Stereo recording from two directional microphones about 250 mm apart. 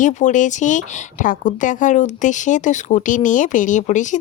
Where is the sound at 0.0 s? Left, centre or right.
Left.